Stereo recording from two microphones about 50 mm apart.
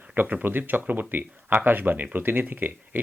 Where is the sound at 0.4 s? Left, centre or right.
Right.